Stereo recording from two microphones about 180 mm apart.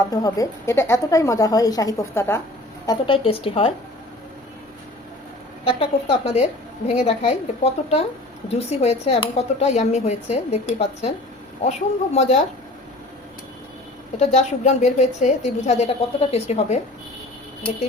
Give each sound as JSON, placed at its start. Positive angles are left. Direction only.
{"t": 0.1, "sound": "a woman's voice", "side_deg": 20}
{"t": 3.2, "sound": "speech", "side_deg": 30}
{"t": 5.6, "sound": "speech", "side_deg": 35}
{"t": 12.1, "sound": "speech", "side_deg": 35}
{"t": 14.2, "sound": "speech", "side_deg": 40}